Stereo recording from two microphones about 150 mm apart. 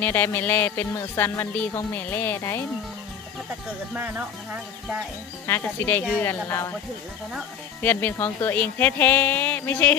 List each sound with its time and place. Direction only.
0.0 s speech: 15° left (ahead or behind)
3.9 s speech: 10° right (ahead or behind)
5.5 s speech: 15° left (ahead or behind)
7.8 s speech: 10° left (ahead or behind)